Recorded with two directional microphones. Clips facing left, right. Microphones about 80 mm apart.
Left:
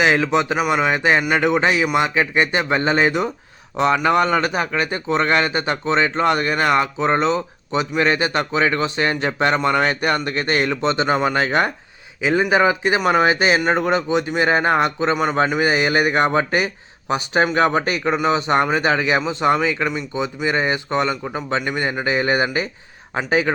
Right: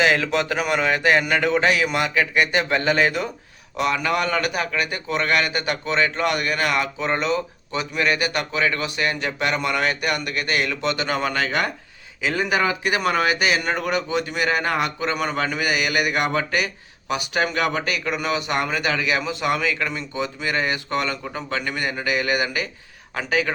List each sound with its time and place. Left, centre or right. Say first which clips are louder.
0.0 s a man's voice: left 3 dB; left